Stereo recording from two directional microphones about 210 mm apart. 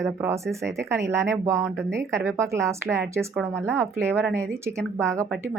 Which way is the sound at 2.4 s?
15° right (ahead or behind).